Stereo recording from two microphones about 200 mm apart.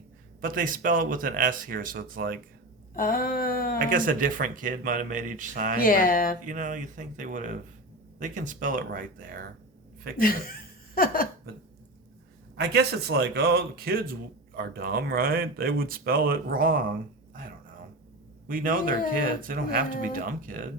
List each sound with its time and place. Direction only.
0.4 s a man's voice: 45° right (ahead or behind)
2.9 s a sound: 45° left (ahead or behind)
3.8 s speech: 45° right (ahead or behind)
5.8 s a sound: 45° left (ahead or behind)
6.4 s a man's voice: 40° right (ahead or behind)
10.2 s speech: 45° left (ahead or behind)
12.5 s a man's voice: 55° right (ahead or behind)
18.4 s a man's voice: 45° right (ahead or behind)